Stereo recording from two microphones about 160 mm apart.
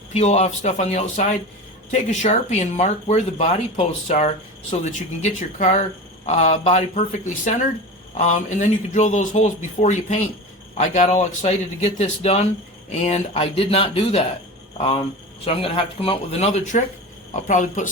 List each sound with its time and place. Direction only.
0.1 s speech: 45° left (ahead or behind)